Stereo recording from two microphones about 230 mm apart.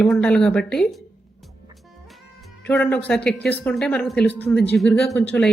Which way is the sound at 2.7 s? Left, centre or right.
Centre.